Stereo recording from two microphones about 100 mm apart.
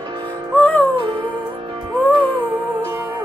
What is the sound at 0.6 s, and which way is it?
Music, 15° left (ahead or behind).